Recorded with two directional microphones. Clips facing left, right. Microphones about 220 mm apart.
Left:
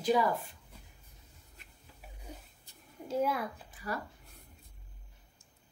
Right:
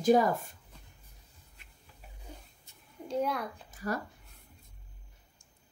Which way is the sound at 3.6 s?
45° right (ahead or behind).